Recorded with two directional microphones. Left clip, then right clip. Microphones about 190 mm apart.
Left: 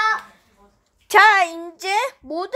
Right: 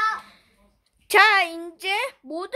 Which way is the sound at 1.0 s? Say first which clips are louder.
Left 4 dB; 15° right (ahead or behind).